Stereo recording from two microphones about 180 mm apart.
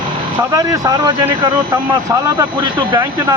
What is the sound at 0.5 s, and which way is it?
Speech, 20° right (ahead or behind).